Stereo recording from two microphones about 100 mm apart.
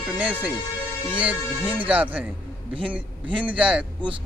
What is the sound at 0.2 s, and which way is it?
A man's voice, 15° right (ahead or behind).